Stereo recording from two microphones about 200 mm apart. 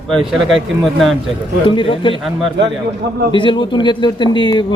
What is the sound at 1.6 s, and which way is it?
Speech, 25° left (ahead or behind).